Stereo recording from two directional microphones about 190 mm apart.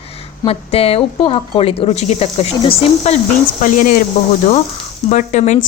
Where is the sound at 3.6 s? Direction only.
45° left (ahead or behind).